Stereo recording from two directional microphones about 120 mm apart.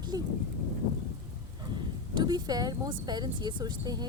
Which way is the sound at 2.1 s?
35° right (ahead or behind).